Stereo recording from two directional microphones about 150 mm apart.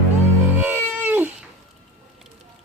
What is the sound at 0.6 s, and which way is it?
Cat, 15° right (ahead or behind).